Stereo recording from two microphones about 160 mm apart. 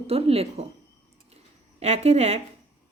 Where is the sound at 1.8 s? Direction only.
40° right (ahead or behind).